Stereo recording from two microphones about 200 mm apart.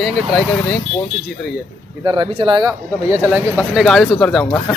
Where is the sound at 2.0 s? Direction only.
25° right (ahead or behind); by 4.4 s 5° left (ahead or behind).